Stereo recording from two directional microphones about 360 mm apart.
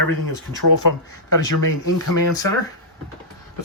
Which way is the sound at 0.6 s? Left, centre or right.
Left.